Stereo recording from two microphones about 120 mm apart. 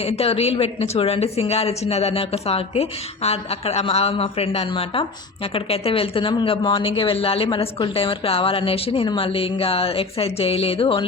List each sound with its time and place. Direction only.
0.0 s a woman's voice: 55° left (ahead or behind)